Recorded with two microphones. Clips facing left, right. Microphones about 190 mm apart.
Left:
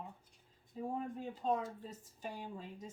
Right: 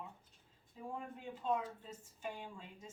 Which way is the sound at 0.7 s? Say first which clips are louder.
Left 6 dB; 40° left (ahead or behind).